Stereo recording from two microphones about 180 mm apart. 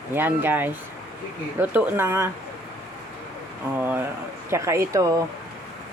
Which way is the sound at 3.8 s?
10° right (ahead or behind).